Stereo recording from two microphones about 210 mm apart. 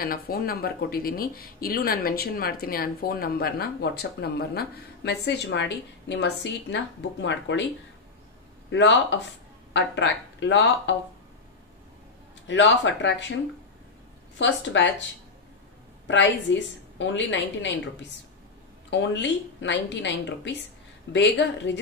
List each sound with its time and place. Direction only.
0.0 s speech: 45° left (ahead or behind)
8.6 s a woman's voice: 60° left (ahead or behind)
12.4 s a woman's voice: 60° left (ahead or behind)
14.4 s a woman's voice: 60° left (ahead or behind)
16.1 s a woman's voice: 60° left (ahead or behind)
18.9 s a woman's voice: 60° left (ahead or behind)